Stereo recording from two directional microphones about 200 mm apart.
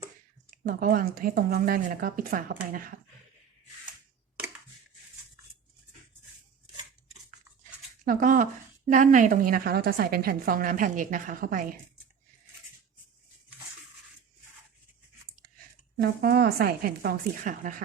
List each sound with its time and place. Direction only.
0.5 s a woman's voice: 45° right (ahead or behind)
8.0 s a woman's voice: 40° right (ahead or behind)
16.0 s a woman's voice: 50° right (ahead or behind)